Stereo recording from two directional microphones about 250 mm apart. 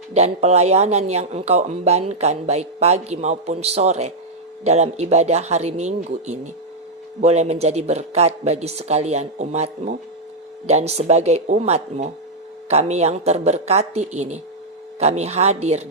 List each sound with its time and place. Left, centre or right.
0.1 s speech: right